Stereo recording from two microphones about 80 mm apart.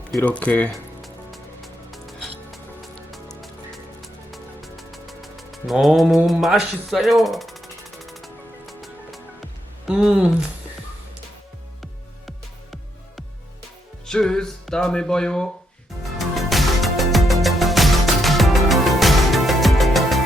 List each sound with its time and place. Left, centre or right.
0.2 s speech: centre
1.0 s music: centre
9.8 s speech: centre
14.1 s music: centre